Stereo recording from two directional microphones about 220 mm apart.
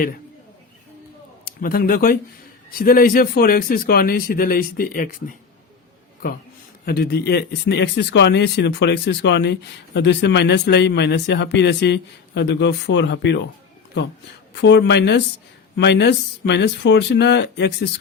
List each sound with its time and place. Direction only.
1.5 s speech: 40° left (ahead or behind)
6.8 s speech: 45° left (ahead or behind)